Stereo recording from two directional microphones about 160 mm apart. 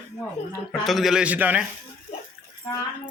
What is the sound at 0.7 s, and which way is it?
Speech, centre (ahead or behind).